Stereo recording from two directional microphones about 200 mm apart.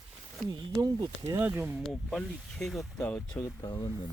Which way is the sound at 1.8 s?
Centre (ahead or behind).